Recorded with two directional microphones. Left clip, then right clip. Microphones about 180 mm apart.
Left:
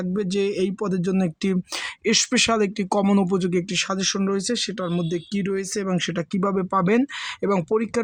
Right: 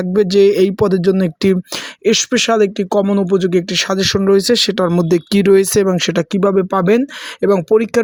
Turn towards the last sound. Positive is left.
turn(degrees=-25)  # may be behind; listen again after turning